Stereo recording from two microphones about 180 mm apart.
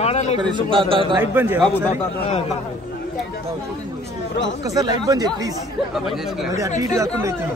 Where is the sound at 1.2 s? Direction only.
10° right (ahead or behind).